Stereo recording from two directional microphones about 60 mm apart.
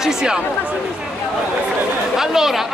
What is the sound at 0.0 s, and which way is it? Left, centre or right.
Speech, centre.